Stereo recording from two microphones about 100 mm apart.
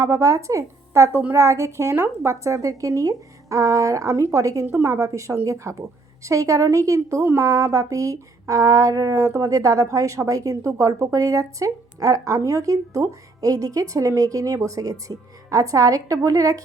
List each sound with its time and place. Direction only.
0.0 s a woman's voice: 30° right (ahead or behind)